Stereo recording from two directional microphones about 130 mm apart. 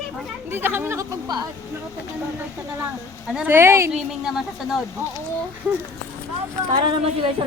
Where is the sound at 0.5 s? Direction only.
15° right (ahead or behind).